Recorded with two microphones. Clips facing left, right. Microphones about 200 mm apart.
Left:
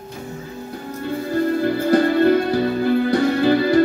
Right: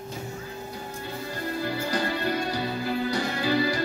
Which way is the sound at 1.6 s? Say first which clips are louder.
Left 10 dB; 55° left (ahead or behind).